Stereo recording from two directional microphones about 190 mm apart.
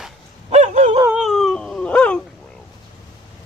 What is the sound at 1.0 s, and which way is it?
Dog, 5° right (ahead or behind).